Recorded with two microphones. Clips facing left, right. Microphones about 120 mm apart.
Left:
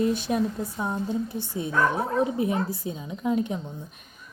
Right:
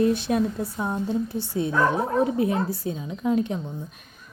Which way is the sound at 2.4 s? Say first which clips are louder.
Right 2 dB; 15° left (ahead or behind).